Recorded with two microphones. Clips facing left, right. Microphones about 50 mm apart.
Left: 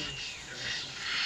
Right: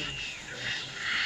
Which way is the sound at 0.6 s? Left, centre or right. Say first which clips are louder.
Right 3 dB; centre.